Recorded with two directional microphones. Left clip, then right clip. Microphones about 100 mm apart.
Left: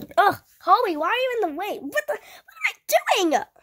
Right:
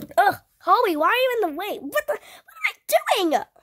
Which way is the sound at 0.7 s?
20° right (ahead or behind).